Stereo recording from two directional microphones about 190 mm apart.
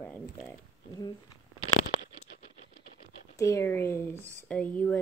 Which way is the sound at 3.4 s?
15° left (ahead or behind).